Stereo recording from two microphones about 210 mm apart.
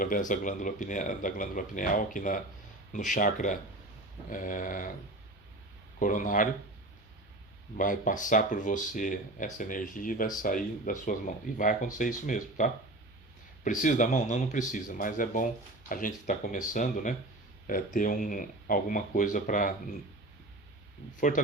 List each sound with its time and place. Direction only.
0.0 s speech: 40° left (ahead or behind)
6.0 s speech: 40° left (ahead or behind)
7.8 s speech: 40° left (ahead or behind)
21.2 s speech: 40° left (ahead or behind)